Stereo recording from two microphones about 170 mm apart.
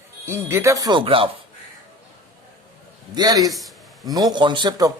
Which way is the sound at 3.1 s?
20° right (ahead or behind).